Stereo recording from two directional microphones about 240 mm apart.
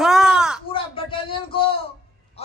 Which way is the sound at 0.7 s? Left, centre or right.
Left.